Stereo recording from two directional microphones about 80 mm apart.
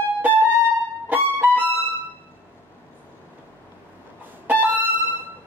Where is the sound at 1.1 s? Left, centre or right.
Right.